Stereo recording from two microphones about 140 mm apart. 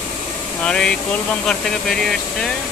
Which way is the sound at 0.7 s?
5° left (ahead or behind).